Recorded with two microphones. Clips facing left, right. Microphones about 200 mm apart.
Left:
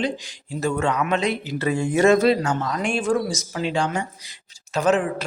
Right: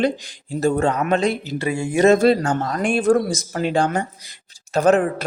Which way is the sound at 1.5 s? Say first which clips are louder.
Left 1 dB; 10° right (ahead or behind).